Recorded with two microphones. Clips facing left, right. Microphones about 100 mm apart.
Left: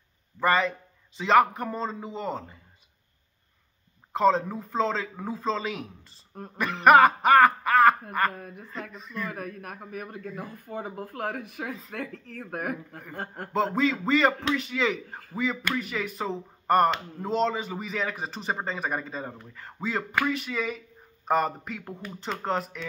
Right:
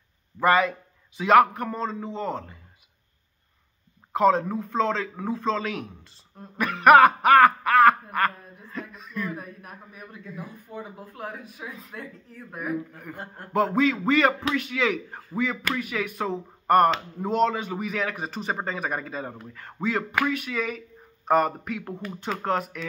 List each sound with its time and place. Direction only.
0.4 s speech: 5° right (ahead or behind)
4.1 s speech: 5° right (ahead or behind)
8.4 s a man's voice: 65° left (ahead or behind)
8.9 s speech: centre (ahead or behind)
9.3 s a man's voice: 65° left (ahead or behind)
12.9 s speech: centre (ahead or behind)